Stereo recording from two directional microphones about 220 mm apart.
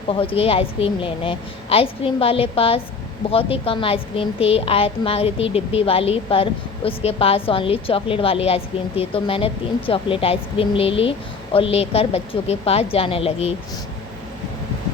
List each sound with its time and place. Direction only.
0.1 s a woman's voice: 25° left (ahead or behind)